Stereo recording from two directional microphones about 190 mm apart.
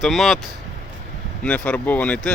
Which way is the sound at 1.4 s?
10° left (ahead or behind).